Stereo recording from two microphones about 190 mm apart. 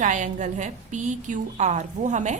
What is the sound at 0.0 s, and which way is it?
A woman's voice, 40° right (ahead or behind).